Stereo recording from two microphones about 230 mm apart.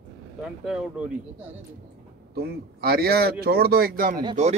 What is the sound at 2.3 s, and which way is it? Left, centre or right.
Speech, right.